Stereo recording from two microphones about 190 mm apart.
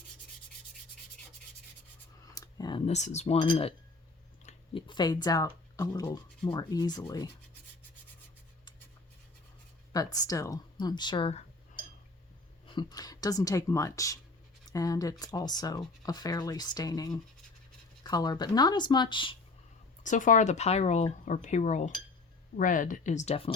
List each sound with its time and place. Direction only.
2.3 s speech: 20° left (ahead or behind)
9.9 s speech: 20° left (ahead or behind)
12.7 s speech: 20° left (ahead or behind)
20.0 s speech: 40° left (ahead or behind)